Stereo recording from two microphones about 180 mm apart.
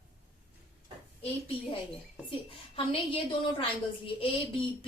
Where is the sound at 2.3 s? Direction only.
30° left (ahead or behind).